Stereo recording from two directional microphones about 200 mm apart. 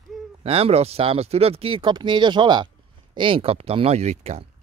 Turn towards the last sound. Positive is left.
turn(degrees=-30)  # may be behind; listen again after turning